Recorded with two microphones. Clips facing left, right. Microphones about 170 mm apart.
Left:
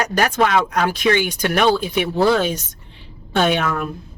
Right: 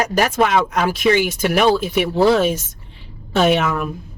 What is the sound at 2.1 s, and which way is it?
Speech, 30° right (ahead or behind).